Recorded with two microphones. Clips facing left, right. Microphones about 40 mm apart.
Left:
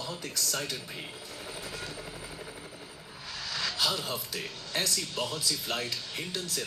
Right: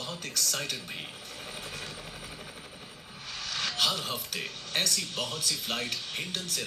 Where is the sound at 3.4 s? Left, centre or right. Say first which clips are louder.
Right 1 dB; right.